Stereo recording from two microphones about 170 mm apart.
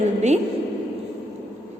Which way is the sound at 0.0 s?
40° right (ahead or behind).